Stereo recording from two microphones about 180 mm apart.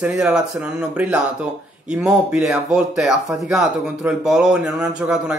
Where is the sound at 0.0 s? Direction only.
5° right (ahead or behind).